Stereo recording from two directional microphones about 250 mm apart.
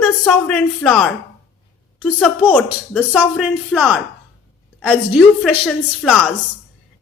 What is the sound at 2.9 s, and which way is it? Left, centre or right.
Speech, centre.